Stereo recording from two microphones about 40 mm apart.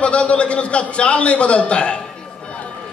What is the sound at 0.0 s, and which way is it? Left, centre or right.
A man's voice, left.